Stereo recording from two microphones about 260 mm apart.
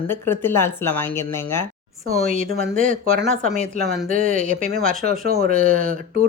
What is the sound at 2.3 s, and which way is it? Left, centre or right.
Speech, right.